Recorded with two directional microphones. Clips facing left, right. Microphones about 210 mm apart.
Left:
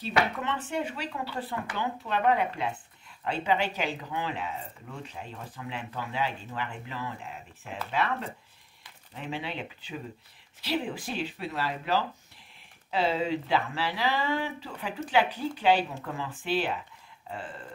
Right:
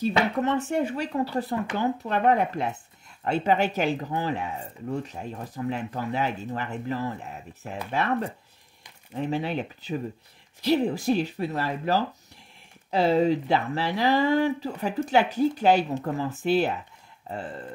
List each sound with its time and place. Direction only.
0.4 s speech: 40° right (ahead or behind)